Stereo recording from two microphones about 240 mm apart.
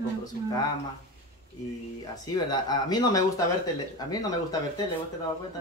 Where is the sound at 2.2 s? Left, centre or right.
Centre.